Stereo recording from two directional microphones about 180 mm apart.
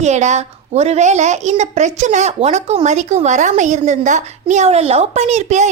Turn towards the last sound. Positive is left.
turn(degrees=-40)  # may be behind; listen again after turning